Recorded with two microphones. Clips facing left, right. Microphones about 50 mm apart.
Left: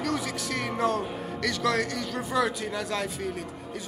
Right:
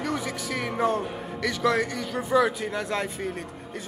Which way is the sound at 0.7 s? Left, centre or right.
Centre.